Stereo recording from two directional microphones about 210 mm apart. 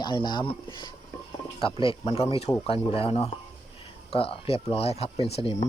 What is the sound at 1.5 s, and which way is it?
Speech, 25° left (ahead or behind).